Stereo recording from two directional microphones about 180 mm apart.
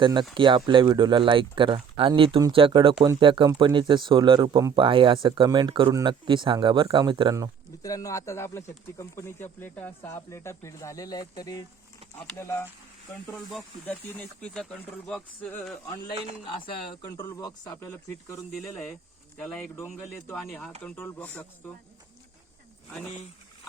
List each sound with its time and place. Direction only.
0.0 s speech: 25° right (ahead or behind)
7.8 s speech: 20° left (ahead or behind)
13.3 s speech: centre (ahead or behind)
15.9 s speech: 25° left (ahead or behind)
19.4 s speech: 5° left (ahead or behind)
20.3 s speech: 5° left (ahead or behind)
22.9 s speech: 5° left (ahead or behind)